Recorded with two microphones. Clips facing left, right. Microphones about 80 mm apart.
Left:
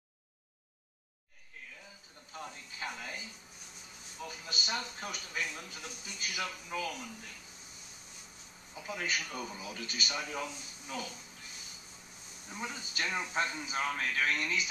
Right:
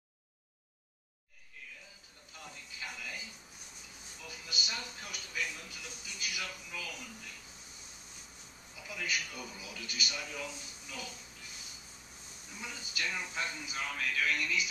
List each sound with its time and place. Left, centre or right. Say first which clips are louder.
2.3 s a sound: left 5 dB; left
4.2 s speech: left 2 dB; left
8.7 s speech: left 2 dB; left
12.4 s speech: left 5 dB; left